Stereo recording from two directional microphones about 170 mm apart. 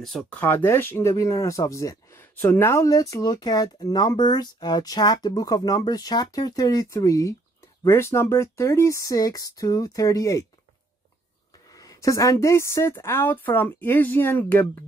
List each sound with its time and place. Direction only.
0.0 s speech: 5° left (ahead or behind)
11.7 s a woman's voice: 20° left (ahead or behind)